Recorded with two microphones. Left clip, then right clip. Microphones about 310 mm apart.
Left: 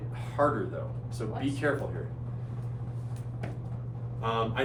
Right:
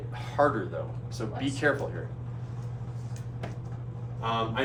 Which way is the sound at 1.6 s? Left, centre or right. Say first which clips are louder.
Right 3 dB; right.